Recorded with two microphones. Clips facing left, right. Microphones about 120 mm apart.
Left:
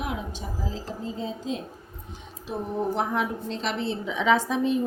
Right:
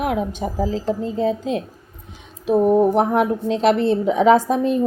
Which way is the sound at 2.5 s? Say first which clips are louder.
Right 14 dB; 55° right (ahead or behind).